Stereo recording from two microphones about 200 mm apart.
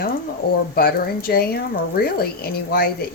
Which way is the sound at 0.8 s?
50° left (ahead or behind).